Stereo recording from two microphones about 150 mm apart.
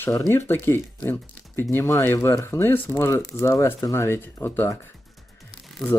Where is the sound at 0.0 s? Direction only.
20° left (ahead or behind).